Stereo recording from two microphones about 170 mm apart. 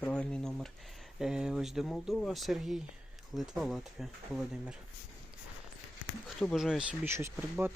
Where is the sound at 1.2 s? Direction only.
5° right (ahead or behind).